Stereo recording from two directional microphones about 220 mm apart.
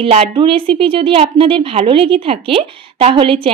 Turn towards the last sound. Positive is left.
turn(degrees=-25)  # may be behind; listen again after turning